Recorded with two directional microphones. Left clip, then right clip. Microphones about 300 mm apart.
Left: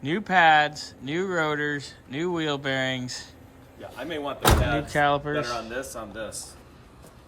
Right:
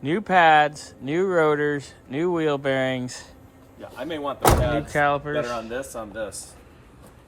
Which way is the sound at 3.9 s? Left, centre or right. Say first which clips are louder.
Right 2 dB; centre.